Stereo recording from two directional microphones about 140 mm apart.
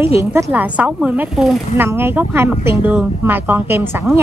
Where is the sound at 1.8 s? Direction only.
15° right (ahead or behind).